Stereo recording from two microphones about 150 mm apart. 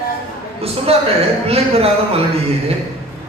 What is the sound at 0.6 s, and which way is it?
A man's voice, 40° right (ahead or behind).